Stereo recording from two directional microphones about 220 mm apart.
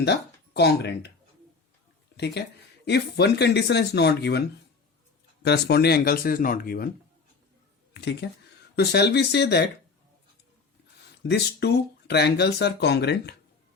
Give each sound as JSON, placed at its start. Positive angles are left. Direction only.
{"t": 0.0, "sound": "speech", "side_deg": 50}
{"t": 2.1, "sound": "speech", "side_deg": 50}
{"t": 7.9, "sound": "speech", "side_deg": 50}
{"t": 11.2, "sound": "speech", "side_deg": 50}